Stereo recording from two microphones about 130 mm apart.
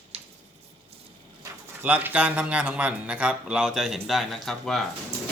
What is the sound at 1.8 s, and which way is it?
Speech, 15° right (ahead or behind).